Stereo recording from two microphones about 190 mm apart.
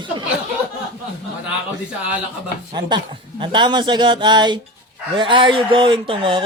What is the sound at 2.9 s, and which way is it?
Speech, 25° right (ahead or behind).